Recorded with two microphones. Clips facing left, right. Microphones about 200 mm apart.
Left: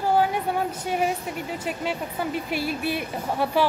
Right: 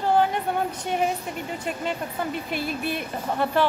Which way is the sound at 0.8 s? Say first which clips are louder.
Even; 5° left (ahead or behind).